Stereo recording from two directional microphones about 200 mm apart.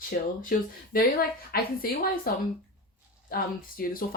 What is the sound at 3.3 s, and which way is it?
Speech, 45° left (ahead or behind).